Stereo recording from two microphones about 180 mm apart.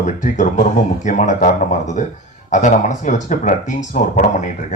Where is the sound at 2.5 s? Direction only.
40° left (ahead or behind).